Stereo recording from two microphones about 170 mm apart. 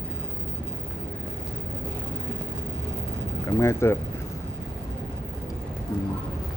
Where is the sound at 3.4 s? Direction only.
15° left (ahead or behind).